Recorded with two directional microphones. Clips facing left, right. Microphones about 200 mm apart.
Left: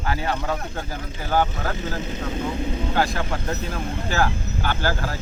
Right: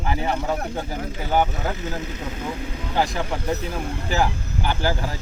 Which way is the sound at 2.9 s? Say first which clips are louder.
Right 2 dB; 15° right (ahead or behind).